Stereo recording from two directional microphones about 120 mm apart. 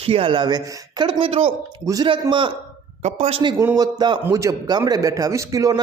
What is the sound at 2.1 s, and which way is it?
Speech, 45° right (ahead or behind).